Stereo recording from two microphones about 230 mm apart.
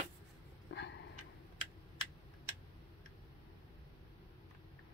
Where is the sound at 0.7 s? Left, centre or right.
Left.